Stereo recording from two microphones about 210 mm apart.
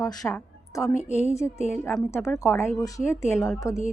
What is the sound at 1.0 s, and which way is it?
Speech, 35° left (ahead or behind).